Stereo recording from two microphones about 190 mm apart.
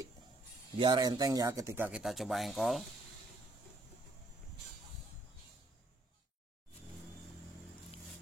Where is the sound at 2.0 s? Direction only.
Centre (ahead or behind).